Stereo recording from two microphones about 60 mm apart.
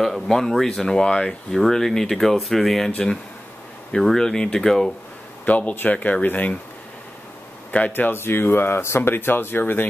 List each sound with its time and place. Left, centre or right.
0.0 s speech: centre
5.4 s speech: left
7.9 s speech: left